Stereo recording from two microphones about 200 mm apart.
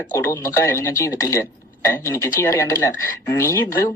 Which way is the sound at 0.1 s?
10° left (ahead or behind).